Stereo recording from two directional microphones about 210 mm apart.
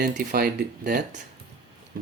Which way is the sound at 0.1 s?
45° right (ahead or behind).